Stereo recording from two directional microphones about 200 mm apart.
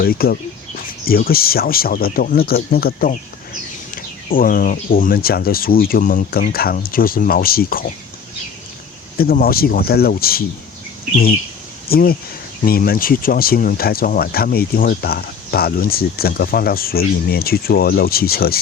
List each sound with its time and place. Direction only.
0.0 s speech: 50° left (ahead or behind)
9.1 s speech: 50° left (ahead or behind)
11.9 s speech: 50° left (ahead or behind)